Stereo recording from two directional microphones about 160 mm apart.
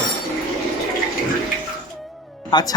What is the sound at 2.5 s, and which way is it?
Speech, 25° left (ahead or behind).